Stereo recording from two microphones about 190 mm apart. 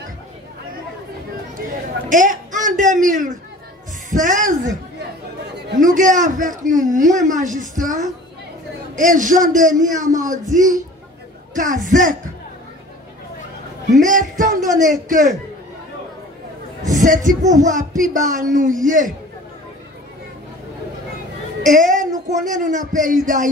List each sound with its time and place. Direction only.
2.0 s a man's voice: 45° right (ahead or behind)
5.8 s a man's voice: 40° right (ahead or behind)
13.9 s speech: 40° right (ahead or behind)
16.8 s a man's voice: 40° right (ahead or behind)
21.6 s speech: 45° right (ahead or behind)